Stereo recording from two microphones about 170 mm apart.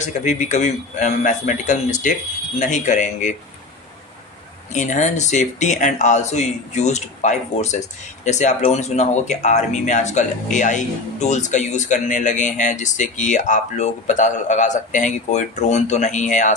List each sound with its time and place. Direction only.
0.0 s speech: 45° left (ahead or behind)
4.7 s speech: 45° left (ahead or behind)